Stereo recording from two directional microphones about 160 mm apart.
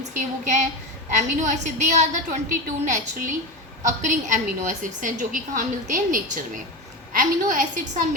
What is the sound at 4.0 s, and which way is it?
A woman's voice, 50° right (ahead or behind).